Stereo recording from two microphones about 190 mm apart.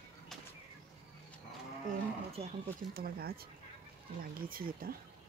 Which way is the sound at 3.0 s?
50° right (ahead or behind).